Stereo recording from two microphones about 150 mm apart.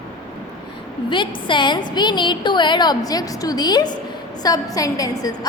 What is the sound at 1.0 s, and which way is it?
A woman's voice, 35° left (ahead or behind).